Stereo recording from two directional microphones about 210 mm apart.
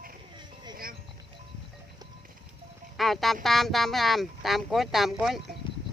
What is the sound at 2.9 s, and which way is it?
Speech, centre (ahead or behind).